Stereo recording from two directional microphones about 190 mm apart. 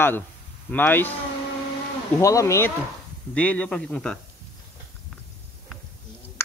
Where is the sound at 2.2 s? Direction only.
15° left (ahead or behind).